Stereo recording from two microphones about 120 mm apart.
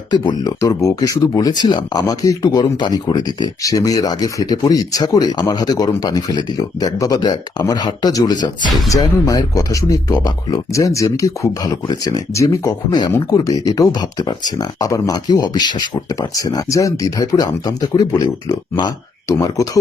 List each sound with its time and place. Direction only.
0.1 s speech: 35° left (ahead or behind)